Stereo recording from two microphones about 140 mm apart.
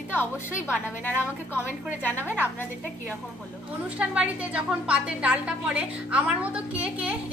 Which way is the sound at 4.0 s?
10° right (ahead or behind).